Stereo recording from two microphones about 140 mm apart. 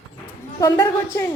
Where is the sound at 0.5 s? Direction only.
25° left (ahead or behind).